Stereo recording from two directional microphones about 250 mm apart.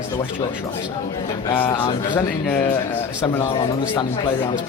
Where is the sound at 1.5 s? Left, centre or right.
Centre.